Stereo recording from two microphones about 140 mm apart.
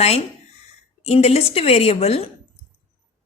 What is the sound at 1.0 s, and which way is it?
A woman's voice, 50° left (ahead or behind).